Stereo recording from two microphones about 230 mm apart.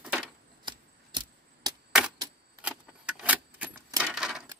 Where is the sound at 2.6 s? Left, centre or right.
Centre.